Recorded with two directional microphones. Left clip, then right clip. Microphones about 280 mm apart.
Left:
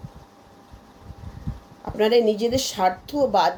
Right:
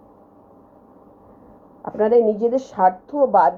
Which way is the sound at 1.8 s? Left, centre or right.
Centre.